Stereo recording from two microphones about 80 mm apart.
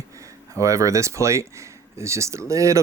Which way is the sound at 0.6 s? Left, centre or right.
Right.